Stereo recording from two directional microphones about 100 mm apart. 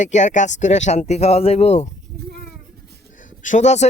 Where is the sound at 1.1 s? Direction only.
90° left.